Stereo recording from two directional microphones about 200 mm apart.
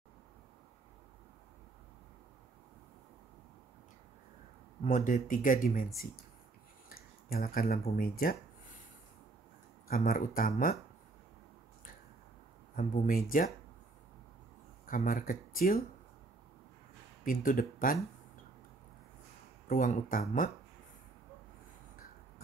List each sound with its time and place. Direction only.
4.8 s speech: 40° left (ahead or behind)
6.9 s speech: 45° left (ahead or behind)
9.8 s speech: 45° left (ahead or behind)
12.7 s speech: 40° left (ahead or behind)
14.9 s speech: 45° left (ahead or behind)
17.2 s speech: 45° left (ahead or behind)
19.7 s speech: 45° left (ahead or behind)